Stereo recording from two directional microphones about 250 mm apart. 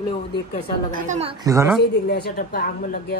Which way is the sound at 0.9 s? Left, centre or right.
Right.